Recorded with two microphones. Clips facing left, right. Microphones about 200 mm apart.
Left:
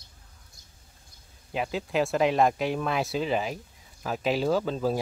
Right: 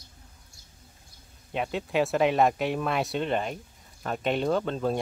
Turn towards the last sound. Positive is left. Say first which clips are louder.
# left 1 dB
turn(degrees=5)  # may be behind; listen again after turning